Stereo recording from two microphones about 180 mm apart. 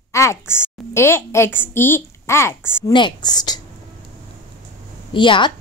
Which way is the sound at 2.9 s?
25° left (ahead or behind).